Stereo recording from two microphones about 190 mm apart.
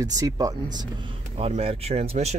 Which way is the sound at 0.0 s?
20° right (ahead or behind).